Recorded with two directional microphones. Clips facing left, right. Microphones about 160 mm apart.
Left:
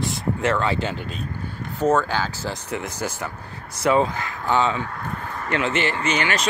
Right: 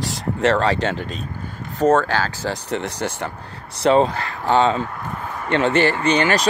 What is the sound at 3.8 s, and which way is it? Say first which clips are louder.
Speech: right 4 dB; 30° right (ahead or behind).